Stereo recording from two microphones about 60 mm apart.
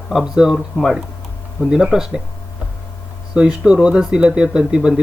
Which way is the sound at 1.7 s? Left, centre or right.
Centre.